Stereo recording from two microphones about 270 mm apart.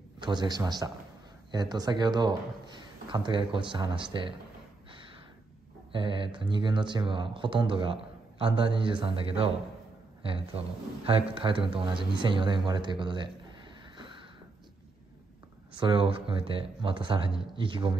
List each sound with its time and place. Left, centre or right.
0.2 s a man's voice: centre
5.9 s a man's voice: centre
13.9 s a sound: centre
15.8 s speech: centre